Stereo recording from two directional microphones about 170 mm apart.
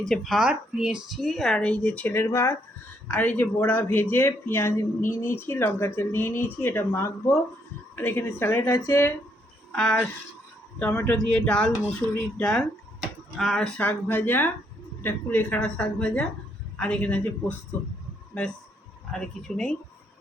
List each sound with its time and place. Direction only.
0.1 s speech: centre (ahead or behind); by 9.1 s 15° left (ahead or behind)
9.7 s speech: 5° left (ahead or behind)
12.0 s speech: 10° right (ahead or behind)
12.4 s speech: 5° left (ahead or behind)
19.1 s speech: 5° left (ahead or behind)